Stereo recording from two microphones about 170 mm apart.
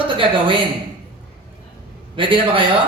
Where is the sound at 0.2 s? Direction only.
30° right (ahead or behind).